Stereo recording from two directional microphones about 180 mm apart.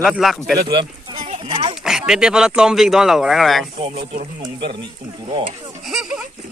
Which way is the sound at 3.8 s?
30° right (ahead or behind).